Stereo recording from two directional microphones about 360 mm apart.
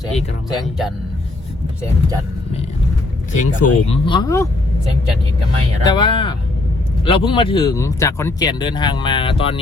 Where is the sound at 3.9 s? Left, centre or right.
Centre.